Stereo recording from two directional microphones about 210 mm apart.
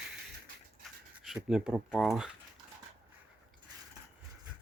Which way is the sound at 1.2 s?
5° right (ahead or behind).